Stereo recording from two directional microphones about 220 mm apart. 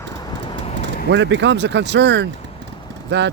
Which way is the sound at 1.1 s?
55° right (ahead or behind).